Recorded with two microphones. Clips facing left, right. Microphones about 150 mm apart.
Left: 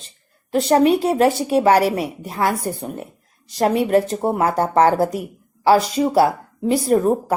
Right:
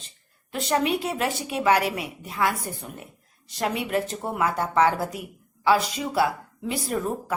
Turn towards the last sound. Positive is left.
turn(degrees=40)  # may be behind; listen again after turning